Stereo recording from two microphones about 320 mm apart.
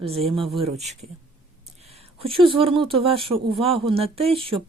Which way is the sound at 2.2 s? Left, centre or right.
Centre.